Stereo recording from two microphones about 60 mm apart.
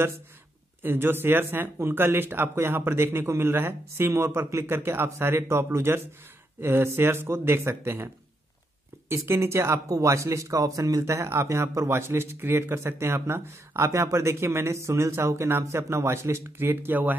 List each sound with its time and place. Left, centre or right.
0.8 s a man's voice: right
9.1 s a man's voice: right
9.8 s speech: right
11.1 s a man's voice: right